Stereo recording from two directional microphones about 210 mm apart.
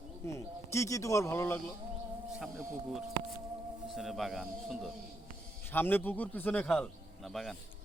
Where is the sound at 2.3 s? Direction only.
Centre (ahead or behind).